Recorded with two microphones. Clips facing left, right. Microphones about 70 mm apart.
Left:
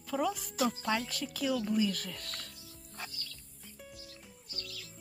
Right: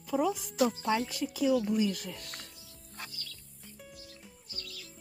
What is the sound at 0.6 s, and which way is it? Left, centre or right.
Speech, centre.